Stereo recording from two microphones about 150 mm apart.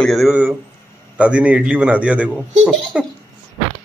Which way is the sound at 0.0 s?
Centre (ahead or behind).